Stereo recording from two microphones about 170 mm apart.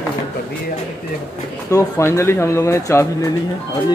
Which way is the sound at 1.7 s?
15° left (ahead or behind).